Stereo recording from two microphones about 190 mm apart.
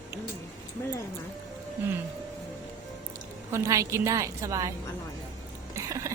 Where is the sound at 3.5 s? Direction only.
15° right (ahead or behind).